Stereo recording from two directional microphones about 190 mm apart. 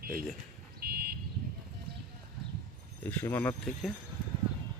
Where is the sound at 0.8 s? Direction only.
55° right (ahead or behind).